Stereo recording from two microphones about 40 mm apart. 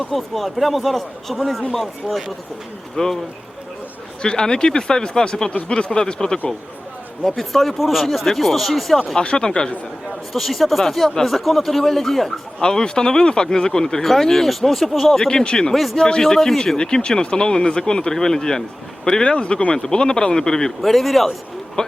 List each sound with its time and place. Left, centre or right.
0.0 s speech: centre
4.2 s speech: centre
5.5 s speech: left
5.8 s speech: left
7.3 s speech: centre
9.1 s speech: left
10.3 s speech: centre
12.6 s speech: centre
15.3 s speech: centre
15.7 s speech: centre
16.0 s speech: left
16.2 s speech: centre
20.9 s speech: centre
21.8 s speech: left